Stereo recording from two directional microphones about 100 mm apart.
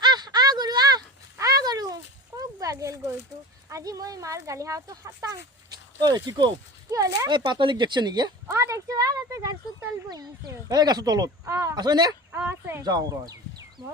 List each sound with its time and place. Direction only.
0.0 s a sound: 45° right (ahead or behind)
3.7 s speech: 35° right (ahead or behind)
6.9 s speech: 35° right (ahead or behind)
7.3 s speech: 50° right (ahead or behind)
8.4 s speech: 30° right (ahead or behind)
10.7 s speech: 40° right (ahead or behind)
11.4 s speech: 30° right (ahead or behind)
11.7 s speech: 45° right (ahead or behind)
12.5 s speech: 25° right (ahead or behind)
12.8 s speech: 40° right (ahead or behind)